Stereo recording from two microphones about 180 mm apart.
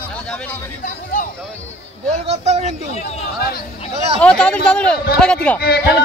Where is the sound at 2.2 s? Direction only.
40° right (ahead or behind).